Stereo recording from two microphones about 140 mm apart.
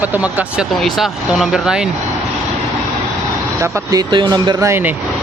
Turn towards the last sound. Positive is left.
turn(degrees=-20)  # may be behind; listen again after turning